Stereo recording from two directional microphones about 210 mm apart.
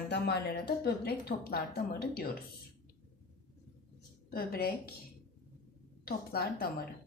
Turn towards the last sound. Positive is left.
turn(degrees=45)  # may be behind; listen again after turning